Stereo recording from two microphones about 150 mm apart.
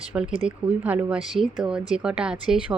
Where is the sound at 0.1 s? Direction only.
5° right (ahead or behind).